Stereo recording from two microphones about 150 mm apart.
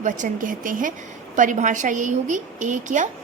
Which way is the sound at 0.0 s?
60° right (ahead or behind).